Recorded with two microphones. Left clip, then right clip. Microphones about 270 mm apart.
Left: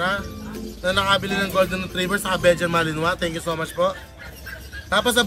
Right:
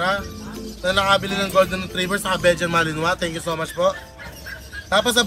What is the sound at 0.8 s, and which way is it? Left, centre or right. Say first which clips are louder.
Speech: right 2 dB; centre.